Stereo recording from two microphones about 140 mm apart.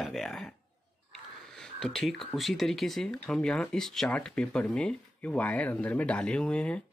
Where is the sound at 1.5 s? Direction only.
5° left (ahead or behind).